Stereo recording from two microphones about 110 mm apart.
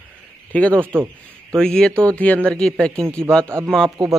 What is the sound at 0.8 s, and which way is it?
Speech, 20° right (ahead or behind).